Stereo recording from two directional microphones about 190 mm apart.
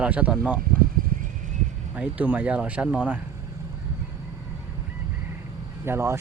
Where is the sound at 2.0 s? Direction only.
5° right (ahead or behind).